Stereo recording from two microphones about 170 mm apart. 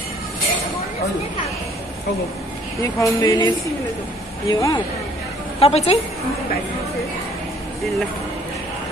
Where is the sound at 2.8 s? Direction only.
25° left (ahead or behind).